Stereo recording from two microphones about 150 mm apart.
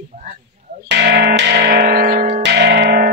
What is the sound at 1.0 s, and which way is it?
Music, 90° right.